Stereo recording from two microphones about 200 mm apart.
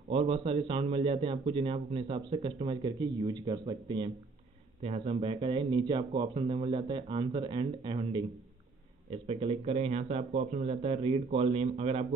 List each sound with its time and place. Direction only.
0.1 s a man's voice: 30° right (ahead or behind)